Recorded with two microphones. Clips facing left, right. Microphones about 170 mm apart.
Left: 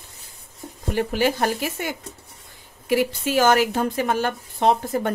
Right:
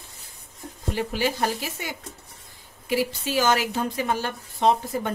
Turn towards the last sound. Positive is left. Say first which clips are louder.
# left 2 dB
turn(degrees=55)  # may be behind; listen again after turning